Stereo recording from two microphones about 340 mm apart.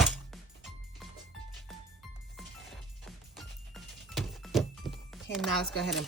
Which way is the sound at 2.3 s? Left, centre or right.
Centre.